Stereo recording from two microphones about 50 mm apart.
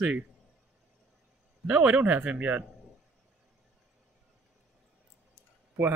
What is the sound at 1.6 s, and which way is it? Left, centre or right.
Speech, right.